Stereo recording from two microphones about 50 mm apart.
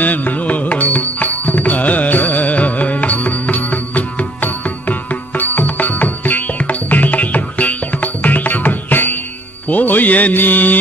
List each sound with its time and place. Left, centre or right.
0.0 s music: left